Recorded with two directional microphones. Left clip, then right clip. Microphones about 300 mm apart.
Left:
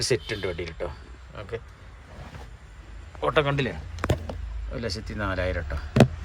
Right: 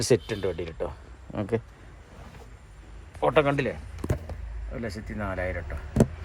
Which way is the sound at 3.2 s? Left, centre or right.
Centre.